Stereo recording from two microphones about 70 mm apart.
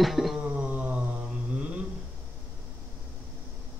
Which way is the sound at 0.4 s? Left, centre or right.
Centre.